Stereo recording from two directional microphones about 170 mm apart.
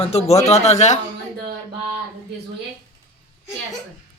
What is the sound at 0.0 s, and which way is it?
Speech, 35° left (ahead or behind).